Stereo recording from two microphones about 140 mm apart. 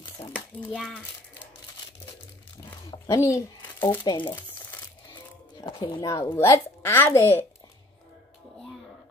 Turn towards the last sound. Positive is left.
turn(degrees=15)  # may be behind; listen again after turning